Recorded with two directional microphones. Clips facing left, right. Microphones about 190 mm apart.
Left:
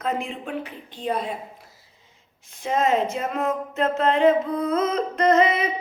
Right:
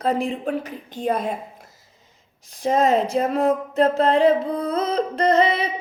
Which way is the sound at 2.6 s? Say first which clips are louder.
Right 3 dB; 35° right (ahead or behind).